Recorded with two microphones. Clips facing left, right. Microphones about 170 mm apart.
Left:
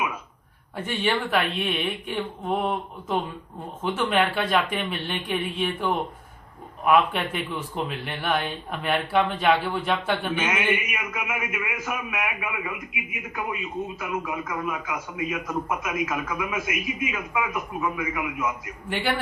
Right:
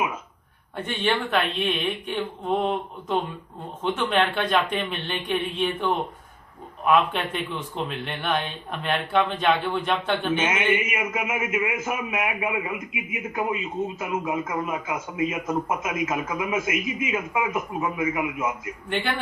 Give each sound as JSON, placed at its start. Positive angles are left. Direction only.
{"t": 0.8, "sound": "speech", "side_deg": 5}
{"t": 10.3, "sound": "a man's voice", "side_deg": -25}
{"t": 18.9, "sound": "a man's voice", "side_deg": 5}